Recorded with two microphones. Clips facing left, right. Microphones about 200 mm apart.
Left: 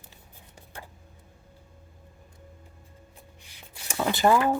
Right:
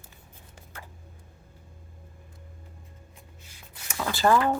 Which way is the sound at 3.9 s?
25° left (ahead or behind).